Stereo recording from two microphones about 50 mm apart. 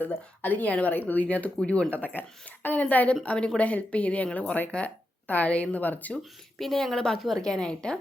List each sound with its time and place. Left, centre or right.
0.0 s speech: left
3.2 s a woman's voice: left
6.6 s a woman's voice: centre